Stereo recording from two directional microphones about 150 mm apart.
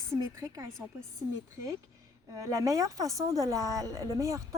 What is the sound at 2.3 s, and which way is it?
Speech, 20° right (ahead or behind).